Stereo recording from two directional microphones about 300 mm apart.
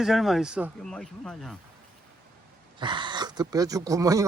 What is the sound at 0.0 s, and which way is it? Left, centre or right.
Speech, centre.